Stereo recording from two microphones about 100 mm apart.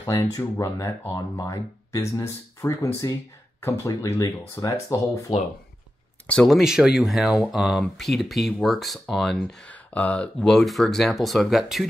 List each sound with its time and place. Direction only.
0.1 s speech: 30° left (ahead or behind)
6.2 s speech: 10° left (ahead or behind)
6.5 s speech: 5° right (ahead or behind)
9.7 s speech: 15° left (ahead or behind); by 11.9 s centre (ahead or behind)